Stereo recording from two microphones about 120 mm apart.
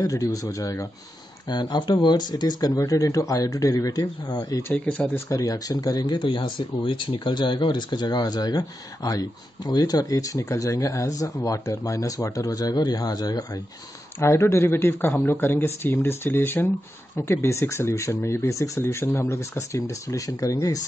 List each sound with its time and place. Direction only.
0.0 s speech: 25° left (ahead or behind)
4.8 s speech: 10° left (ahead or behind)
5.1 s speech: 30° left (ahead or behind)
14.2 s speech: 20° left (ahead or behind)